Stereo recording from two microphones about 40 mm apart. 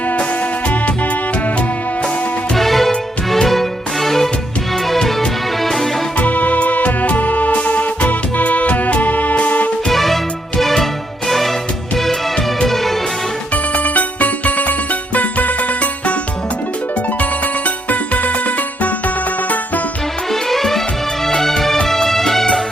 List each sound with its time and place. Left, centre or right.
2.6 s music: centre
6.1 s music: left
9.9 s music: centre
13.5 s music: left
17.8 s music: left
20.3 s music: centre